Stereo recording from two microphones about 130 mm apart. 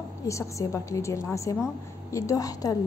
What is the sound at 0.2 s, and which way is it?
A woman's voice, 25° left (ahead or behind).